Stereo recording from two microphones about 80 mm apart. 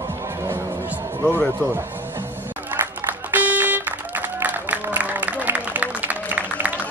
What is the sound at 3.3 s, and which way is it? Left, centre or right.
Music, right.